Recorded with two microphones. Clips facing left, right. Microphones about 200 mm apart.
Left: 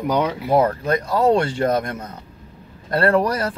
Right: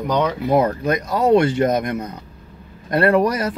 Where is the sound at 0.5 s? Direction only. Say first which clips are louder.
Left 1 dB; 15° right (ahead or behind).